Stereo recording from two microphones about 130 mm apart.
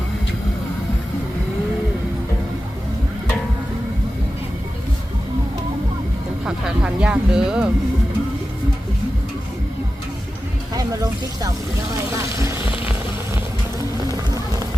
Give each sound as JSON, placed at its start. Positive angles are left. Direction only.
{"t": 6.4, "sound": "music", "side_deg": -10}
{"t": 10.8, "sound": "a sound", "side_deg": -25}
{"t": 11.9, "sound": "vehicle", "side_deg": -20}